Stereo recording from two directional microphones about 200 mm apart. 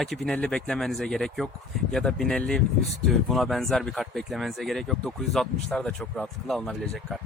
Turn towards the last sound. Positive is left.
turn(degrees=0)  # may be behind; listen again after turning